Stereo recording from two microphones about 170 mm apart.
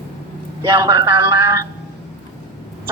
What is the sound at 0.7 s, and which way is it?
Speech, 20° right (ahead or behind).